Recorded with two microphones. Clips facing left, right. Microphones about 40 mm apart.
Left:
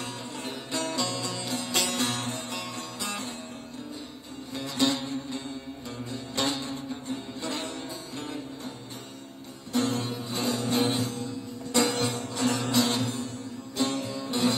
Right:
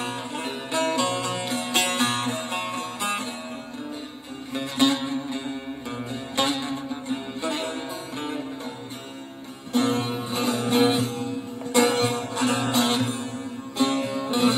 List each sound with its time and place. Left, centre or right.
0.0 s music: right
4.6 s music: right
9.7 s music: right